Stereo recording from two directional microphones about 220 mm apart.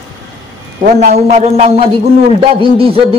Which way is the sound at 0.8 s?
35° right (ahead or behind).